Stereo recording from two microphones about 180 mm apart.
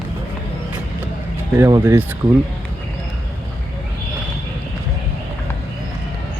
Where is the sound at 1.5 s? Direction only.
15° right (ahead or behind).